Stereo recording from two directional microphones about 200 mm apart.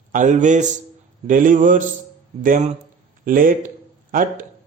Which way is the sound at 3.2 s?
45° right (ahead or behind).